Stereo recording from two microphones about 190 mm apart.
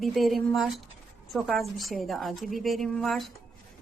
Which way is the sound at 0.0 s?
Centre (ahead or behind).